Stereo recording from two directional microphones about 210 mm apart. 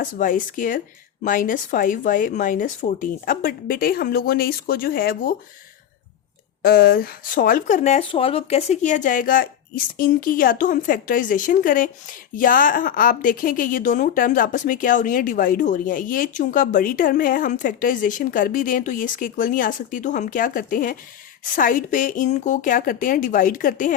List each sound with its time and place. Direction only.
0.0 s a woman's voice: 40° left (ahead or behind)
6.6 s a woman's voice: 45° left (ahead or behind)